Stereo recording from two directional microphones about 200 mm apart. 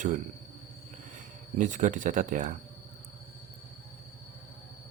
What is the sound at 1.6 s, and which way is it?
Speech, 40° right (ahead or behind).